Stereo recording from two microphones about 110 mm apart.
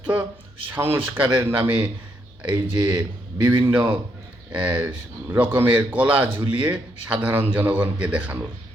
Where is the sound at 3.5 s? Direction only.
20° right (ahead or behind).